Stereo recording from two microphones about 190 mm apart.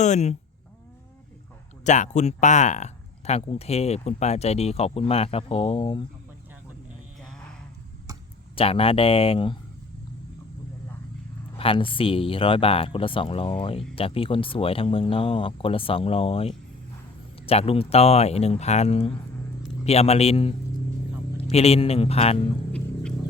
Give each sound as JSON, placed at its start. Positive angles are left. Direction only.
{"t": 0.0, "sound": "speech", "side_deg": 35}
{"t": 1.8, "sound": "speech", "side_deg": 40}
{"t": 8.5, "sound": "speech", "side_deg": 30}
{"t": 11.5, "sound": "speech", "side_deg": 30}
{"t": 21.5, "sound": "speech", "side_deg": 30}